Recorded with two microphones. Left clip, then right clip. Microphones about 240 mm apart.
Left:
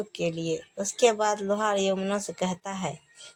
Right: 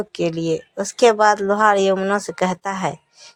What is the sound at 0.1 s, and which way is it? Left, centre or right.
Speech, right.